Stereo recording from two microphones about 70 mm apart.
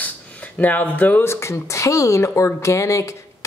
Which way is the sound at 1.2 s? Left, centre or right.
Left.